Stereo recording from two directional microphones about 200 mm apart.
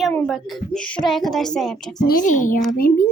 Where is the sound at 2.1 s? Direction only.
40° left (ahead or behind).